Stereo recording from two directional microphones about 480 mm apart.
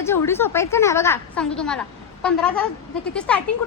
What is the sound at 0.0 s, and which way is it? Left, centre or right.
A man's voice, centre.